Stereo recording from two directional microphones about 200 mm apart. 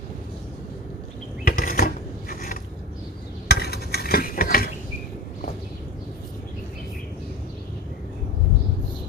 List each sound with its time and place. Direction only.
1.5 s a sound: 45° left (ahead or behind)
2.3 s mechanisms: 45° left (ahead or behind)
3.5 s stir: 50° left (ahead or behind)